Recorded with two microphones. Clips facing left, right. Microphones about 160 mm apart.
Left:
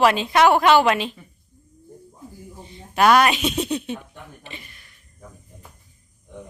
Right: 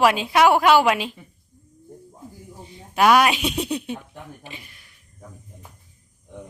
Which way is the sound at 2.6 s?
10° right (ahead or behind).